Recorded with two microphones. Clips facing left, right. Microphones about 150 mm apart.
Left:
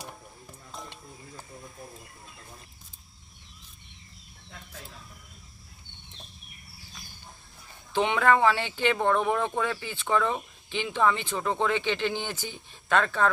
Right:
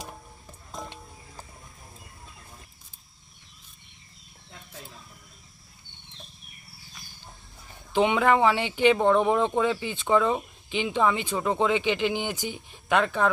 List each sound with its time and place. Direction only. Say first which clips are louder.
7.9 s speech: right 2 dB; 15° right (ahead or behind)